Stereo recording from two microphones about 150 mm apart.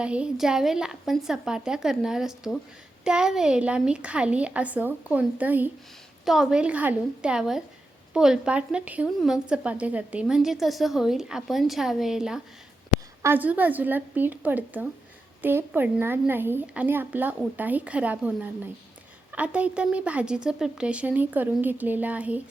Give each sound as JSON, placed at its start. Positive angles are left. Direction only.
{"t": 0.0, "sound": "a woman's voice", "side_deg": -5}